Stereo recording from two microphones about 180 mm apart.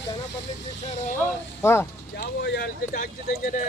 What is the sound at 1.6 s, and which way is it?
Speech, 15° left (ahead or behind).